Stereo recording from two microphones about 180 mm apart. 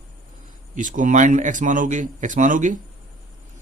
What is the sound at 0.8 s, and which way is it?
Speech, 45° right (ahead or behind).